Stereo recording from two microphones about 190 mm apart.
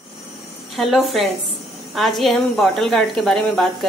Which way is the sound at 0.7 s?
Centre (ahead or behind).